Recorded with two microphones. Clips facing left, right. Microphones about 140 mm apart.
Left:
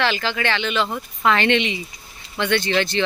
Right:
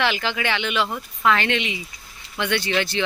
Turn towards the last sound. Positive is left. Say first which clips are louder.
# left 3 dB
turn(degrees=-10)  # may be behind; listen again after turning